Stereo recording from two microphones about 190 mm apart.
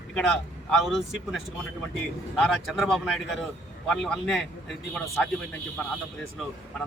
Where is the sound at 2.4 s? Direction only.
Centre (ahead or behind).